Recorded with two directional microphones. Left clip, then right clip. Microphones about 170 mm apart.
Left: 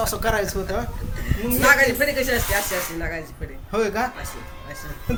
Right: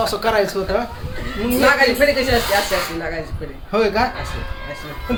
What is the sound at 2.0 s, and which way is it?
Speech, 20° right (ahead or behind).